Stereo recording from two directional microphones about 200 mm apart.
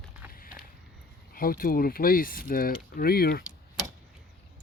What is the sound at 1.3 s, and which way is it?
Speech, 45° left (ahead or behind).